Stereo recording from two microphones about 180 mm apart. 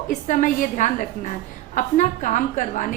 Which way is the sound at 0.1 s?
45° left (ahead or behind).